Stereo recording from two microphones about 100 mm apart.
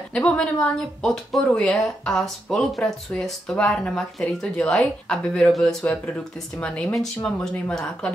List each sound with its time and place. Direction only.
0.1 s speech: 10° left (ahead or behind)